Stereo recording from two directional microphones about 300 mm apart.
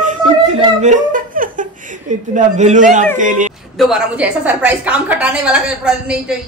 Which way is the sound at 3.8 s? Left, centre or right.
Centre.